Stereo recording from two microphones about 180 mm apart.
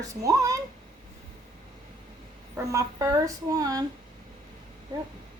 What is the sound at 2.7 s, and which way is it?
A woman's voice, 20° right (ahead or behind).